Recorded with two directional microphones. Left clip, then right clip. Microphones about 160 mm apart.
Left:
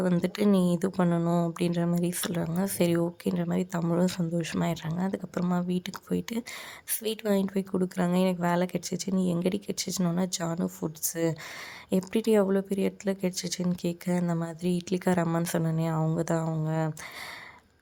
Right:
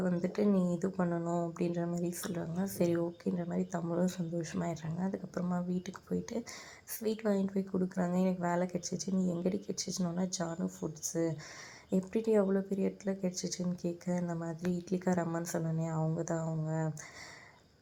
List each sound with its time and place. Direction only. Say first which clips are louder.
0.0 s speech: left 5 dB; 25° left (ahead or behind)
0.5 s speech: left 7 dB; 45° left (ahead or behind)
0.8 s speech: left 7 dB; 30° left (ahead or behind)
9.8 s speech: left 6 dB; 50° left (ahead or behind)
10.3 s speech: left 6 dB; 25° left (ahead or behind)